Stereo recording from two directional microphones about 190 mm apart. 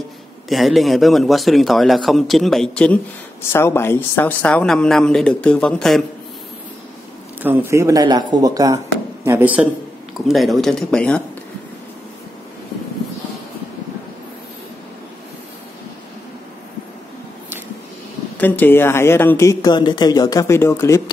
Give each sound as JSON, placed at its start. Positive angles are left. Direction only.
{"t": 0.5, "sound": "speech", "side_deg": 0}
{"t": 7.4, "sound": "speech", "side_deg": -15}
{"t": 18.4, "sound": "speech", "side_deg": 10}